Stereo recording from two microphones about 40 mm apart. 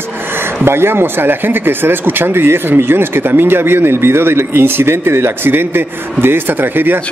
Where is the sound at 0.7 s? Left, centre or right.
Right.